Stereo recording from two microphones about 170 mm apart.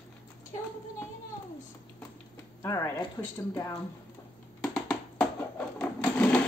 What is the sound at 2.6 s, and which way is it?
Speech, 20° left (ahead or behind).